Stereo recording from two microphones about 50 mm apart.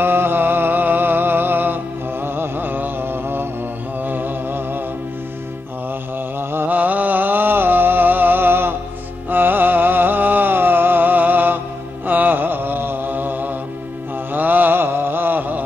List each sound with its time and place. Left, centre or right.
0.0 s music: right
2.2 s a sound: right
4.0 s music: right
6.5 s music: right
12.1 s mantra: right